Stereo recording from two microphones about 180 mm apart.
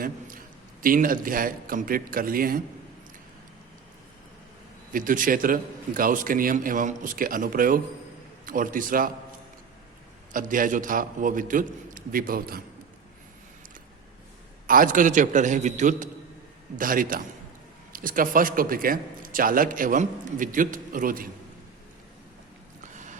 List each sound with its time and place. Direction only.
0.8 s a man's voice: 50° right (ahead or behind)
4.9 s a man's voice: 50° right (ahead or behind)
10.3 s a man's voice: 50° right (ahead or behind)
14.7 s a man's voice: 50° right (ahead or behind)
22.8 s a sound: 45° right (ahead or behind)